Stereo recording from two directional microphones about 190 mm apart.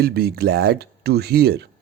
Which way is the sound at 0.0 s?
55° right (ahead or behind).